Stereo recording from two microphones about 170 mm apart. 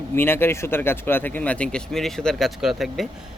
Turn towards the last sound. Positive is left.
turn(degrees=0)  # may be behind; listen again after turning